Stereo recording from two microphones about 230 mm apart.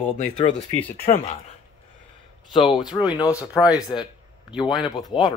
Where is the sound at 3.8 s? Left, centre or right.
Centre.